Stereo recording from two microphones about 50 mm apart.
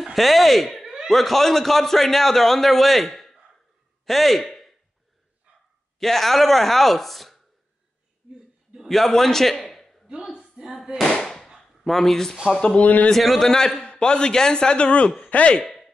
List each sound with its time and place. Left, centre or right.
0.0 s a man's voice: centre
5.9 s a man's voice: centre
8.8 s a man's voice: centre
10.0 s a sound: centre
11.0 s firecracker: centre
11.8 s a man's voice: centre
12.5 s speech: centre
12.8 s a man's voice: left
13.1 s a man's voice: centre
13.4 s a man's voice: centre; by 15.5 s left